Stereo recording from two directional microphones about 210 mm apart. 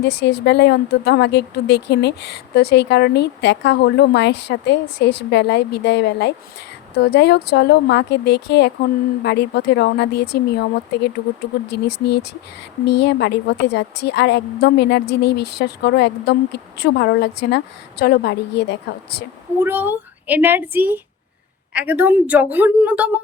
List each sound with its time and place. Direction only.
0.0 s a woman's voice: 55° left (ahead or behind)
19.6 s a woman's voice: 10° right (ahead or behind)